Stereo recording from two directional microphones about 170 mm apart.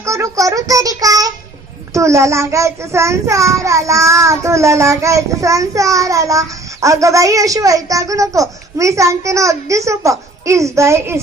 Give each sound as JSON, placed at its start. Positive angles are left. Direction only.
{"t": 0.0, "sound": "child singing", "side_deg": -15}
{"t": 1.9, "sound": "a child's voice", "side_deg": -15}